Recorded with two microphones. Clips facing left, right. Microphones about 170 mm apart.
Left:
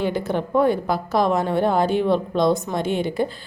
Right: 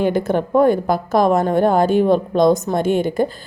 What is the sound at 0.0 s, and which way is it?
A woman's voice, 50° right (ahead or behind).